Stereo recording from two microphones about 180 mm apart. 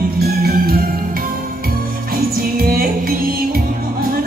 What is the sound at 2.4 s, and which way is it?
Music, 55° right (ahead or behind).